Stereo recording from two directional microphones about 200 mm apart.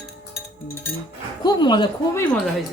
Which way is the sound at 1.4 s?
20° left (ahead or behind).